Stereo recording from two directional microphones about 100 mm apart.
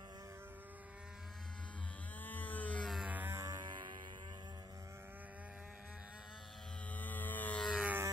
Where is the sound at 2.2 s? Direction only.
15° left (ahead or behind).